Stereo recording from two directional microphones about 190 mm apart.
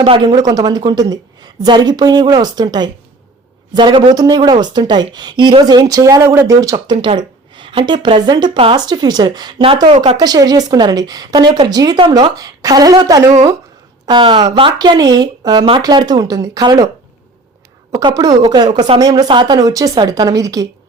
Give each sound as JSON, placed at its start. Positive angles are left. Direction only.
{"t": 0.0, "sound": "a woman's voice", "side_deg": -25}
{"t": 17.9, "sound": "a woman's voice", "side_deg": -20}